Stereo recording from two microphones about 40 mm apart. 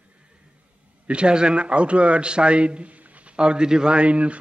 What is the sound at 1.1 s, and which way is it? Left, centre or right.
A man's voice, right.